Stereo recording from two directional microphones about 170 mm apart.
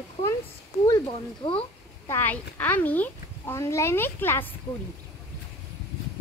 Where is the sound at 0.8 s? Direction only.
25° left (ahead or behind).